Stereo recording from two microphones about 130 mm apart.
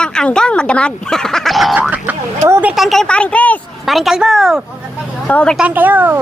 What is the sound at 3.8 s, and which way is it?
Speech, centre (ahead or behind).